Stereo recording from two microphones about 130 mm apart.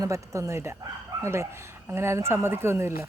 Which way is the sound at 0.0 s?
25° right (ahead or behind).